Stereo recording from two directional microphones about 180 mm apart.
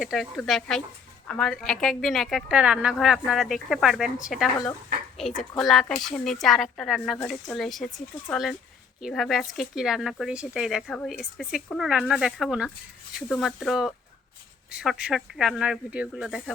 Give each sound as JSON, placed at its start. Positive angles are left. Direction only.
{"t": 0.0, "sound": "speech", "side_deg": 0}